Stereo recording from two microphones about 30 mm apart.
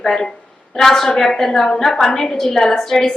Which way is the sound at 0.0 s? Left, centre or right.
Centre.